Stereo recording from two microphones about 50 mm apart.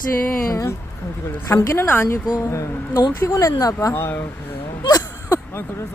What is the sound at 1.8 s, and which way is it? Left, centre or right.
Speech, left.